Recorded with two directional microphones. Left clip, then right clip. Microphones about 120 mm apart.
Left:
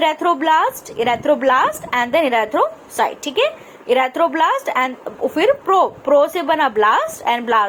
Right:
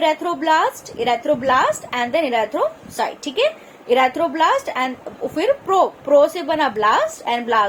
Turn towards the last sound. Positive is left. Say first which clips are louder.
# left 2 dB
turn(degrees=40)  # may be behind; listen again after turning